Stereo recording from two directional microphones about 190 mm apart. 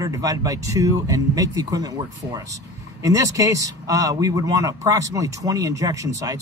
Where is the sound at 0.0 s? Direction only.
15° right (ahead or behind).